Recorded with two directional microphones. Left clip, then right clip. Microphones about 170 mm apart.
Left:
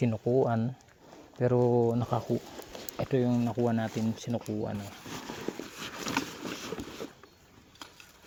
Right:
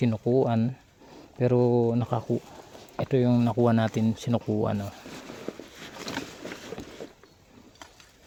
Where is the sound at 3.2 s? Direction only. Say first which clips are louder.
Right 6 dB; 60° right (ahead or behind).